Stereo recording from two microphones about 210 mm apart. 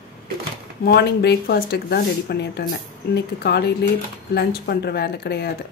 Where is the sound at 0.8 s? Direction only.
50° left (ahead or behind).